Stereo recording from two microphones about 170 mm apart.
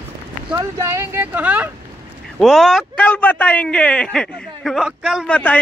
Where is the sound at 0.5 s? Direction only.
15° right (ahead or behind).